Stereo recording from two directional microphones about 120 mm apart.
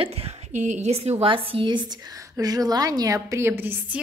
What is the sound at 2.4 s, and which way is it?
A woman's voice, 30° right (ahead or behind).